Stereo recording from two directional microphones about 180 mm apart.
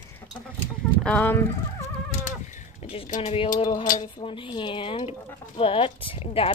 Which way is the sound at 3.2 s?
30° left (ahead or behind).